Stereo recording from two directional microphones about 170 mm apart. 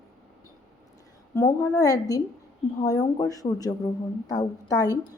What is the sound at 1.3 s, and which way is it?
A woman's voice, 15° left (ahead or behind).